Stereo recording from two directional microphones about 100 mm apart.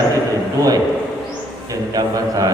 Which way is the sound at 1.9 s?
40° right (ahead or behind).